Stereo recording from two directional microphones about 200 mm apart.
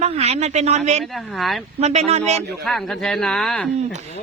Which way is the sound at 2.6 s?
Centre (ahead or behind).